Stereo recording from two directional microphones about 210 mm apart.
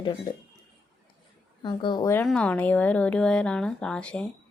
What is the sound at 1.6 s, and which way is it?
A woman's voice, 20° left (ahead or behind).